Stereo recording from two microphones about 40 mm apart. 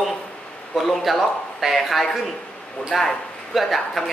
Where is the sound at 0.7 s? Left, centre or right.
Centre.